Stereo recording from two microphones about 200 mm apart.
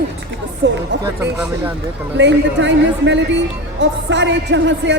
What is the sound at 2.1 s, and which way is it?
A woman's voice, 65° right (ahead or behind).